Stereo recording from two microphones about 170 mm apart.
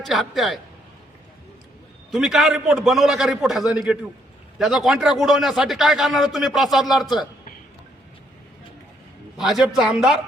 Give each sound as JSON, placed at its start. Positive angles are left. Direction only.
{"t": 0.0, "sound": "a man's voice", "side_deg": 0}
{"t": 2.1, "sound": "a man's voice", "side_deg": 0}
{"t": 9.4, "sound": "a man's voice", "side_deg": 0}